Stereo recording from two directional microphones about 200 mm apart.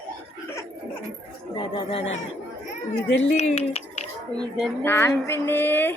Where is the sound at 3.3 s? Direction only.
35° left (ahead or behind).